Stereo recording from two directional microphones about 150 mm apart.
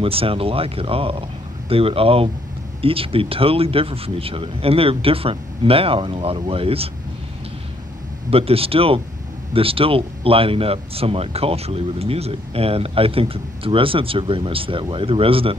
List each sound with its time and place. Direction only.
0.0 s speech: 40° right (ahead or behind)
8.3 s speech: 40° right (ahead or behind)